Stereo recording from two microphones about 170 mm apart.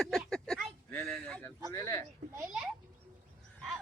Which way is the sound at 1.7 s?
15° left (ahead or behind).